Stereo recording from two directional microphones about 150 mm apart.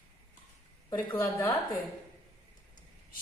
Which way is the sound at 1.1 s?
15° left (ahead or behind).